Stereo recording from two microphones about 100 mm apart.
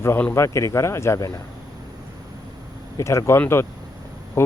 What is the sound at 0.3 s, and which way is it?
Speech, 30° left (ahead or behind).